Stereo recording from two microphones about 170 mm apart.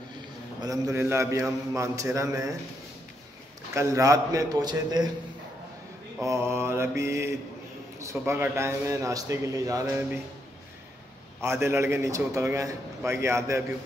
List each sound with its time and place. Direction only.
0.6 s a man's voice: 20° right (ahead or behind)
3.7 s a man's voice: 20° right (ahead or behind)
6.2 s a man's voice: 15° right (ahead or behind)
11.4 s a man's voice: 15° right (ahead or behind)